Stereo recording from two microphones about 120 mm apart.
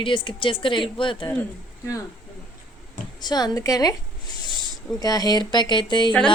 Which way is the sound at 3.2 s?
35° left (ahead or behind).